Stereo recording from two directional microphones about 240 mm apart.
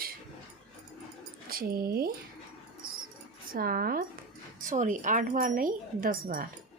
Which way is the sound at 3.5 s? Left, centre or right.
Right.